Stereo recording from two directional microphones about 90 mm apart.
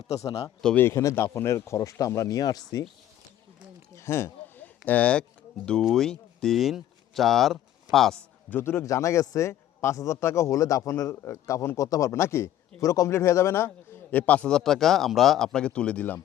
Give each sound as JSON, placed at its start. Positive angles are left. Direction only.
{"t": 0.8, "sound": "a man's voice", "side_deg": 30}
{"t": 3.9, "sound": "a sound", "side_deg": 30}
{"t": 4.9, "sound": "speech", "side_deg": 15}
{"t": 5.8, "sound": "speech", "side_deg": 5}
{"t": 8.4, "sound": "a man's voice", "side_deg": 25}
{"t": 14.2, "sound": "speech", "side_deg": 15}